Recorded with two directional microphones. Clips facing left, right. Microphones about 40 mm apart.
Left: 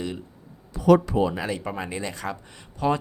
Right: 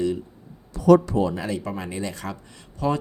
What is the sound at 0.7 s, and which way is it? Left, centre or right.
Speech, centre.